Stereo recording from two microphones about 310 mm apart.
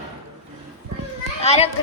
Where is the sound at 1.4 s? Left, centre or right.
Centre.